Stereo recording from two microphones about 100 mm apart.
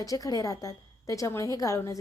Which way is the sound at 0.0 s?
35° left (ahead or behind).